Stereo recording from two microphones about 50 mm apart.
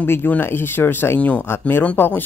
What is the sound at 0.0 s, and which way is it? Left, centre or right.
Speech, left.